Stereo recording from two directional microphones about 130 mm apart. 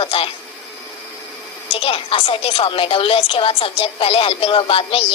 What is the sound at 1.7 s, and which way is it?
A woman's voice, 45° left (ahead or behind).